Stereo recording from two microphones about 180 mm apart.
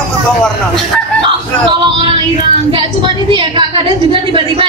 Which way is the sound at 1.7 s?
25° right (ahead or behind).